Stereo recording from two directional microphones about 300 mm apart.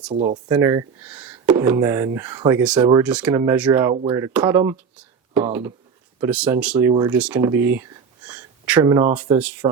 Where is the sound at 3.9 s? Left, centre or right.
Centre.